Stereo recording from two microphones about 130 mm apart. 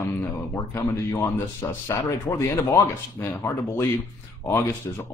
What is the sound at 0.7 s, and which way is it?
A man's voice, 20° left (ahead or behind).